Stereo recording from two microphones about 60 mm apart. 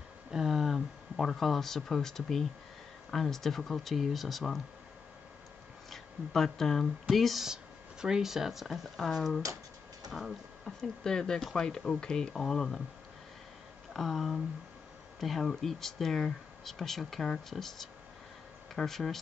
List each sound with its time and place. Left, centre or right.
0.3 s a sound: centre
3.1 s speech: centre
5.9 s speech: centre
10.8 s speech: centre
13.9 s speech: centre